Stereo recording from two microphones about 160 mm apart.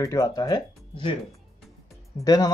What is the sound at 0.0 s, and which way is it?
Speech, 20° left (ahead or behind).